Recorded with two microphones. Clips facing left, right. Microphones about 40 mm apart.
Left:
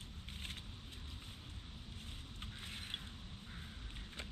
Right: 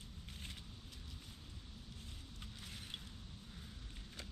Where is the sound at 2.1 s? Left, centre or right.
Left.